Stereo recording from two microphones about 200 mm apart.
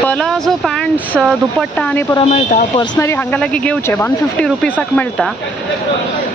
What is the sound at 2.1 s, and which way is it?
Speech, 30° left (ahead or behind).